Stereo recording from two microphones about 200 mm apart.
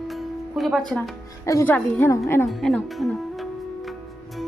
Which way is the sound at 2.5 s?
Centre (ahead or behind).